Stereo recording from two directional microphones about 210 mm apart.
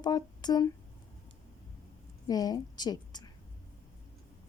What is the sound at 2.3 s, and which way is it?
A woman's voice, 20° left (ahead or behind).